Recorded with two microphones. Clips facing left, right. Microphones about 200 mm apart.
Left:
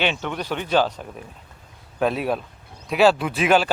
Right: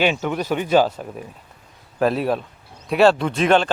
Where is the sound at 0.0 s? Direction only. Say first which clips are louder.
Right 4 dB; 10° right (ahead or behind).